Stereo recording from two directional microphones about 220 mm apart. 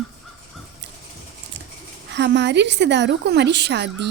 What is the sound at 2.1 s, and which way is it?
A woman's voice, 50° right (ahead or behind).